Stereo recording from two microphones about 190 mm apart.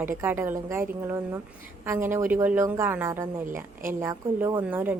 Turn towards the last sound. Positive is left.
turn(degrees=-15)  # may be behind; listen again after turning